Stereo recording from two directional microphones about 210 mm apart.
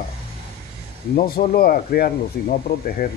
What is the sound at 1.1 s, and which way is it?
Speech, 45° left (ahead or behind).